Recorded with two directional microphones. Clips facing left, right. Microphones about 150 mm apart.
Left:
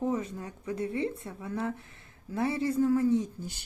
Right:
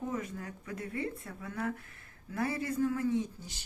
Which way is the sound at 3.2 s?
50° left (ahead or behind).